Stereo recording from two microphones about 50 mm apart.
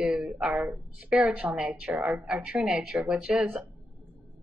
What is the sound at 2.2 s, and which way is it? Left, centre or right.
Speech, centre.